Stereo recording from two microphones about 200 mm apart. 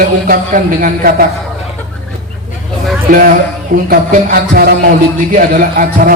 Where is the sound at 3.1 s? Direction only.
45° right (ahead or behind).